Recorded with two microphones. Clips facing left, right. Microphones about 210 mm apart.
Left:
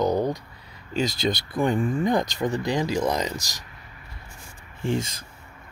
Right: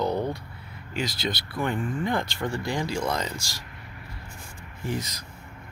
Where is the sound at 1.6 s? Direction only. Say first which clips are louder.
Left 5 dB; 20° left (ahead or behind).